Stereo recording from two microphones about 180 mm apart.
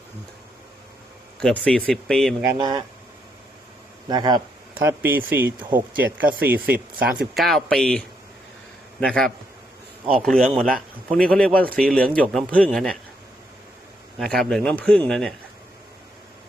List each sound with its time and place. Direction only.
1.4 s speech: 5° left (ahead or behind)
2.4 s speech: 15° right (ahead or behind)
4.1 s speech: 25° right (ahead or behind)
4.7 s speech: 10° right (ahead or behind)
14.2 s speech: centre (ahead or behind)